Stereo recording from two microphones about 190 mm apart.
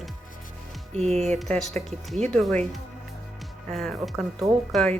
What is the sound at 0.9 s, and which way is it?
Speech, 35° right (ahead or behind).